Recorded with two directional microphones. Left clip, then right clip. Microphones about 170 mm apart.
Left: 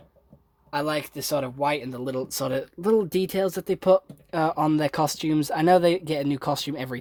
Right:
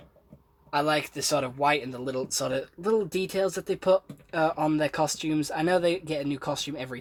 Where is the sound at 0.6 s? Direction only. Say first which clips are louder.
Right 1 dB; 50° left (ahead or behind).